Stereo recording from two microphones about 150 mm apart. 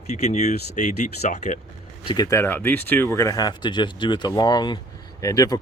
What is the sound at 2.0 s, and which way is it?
Speech, 30° left (ahead or behind).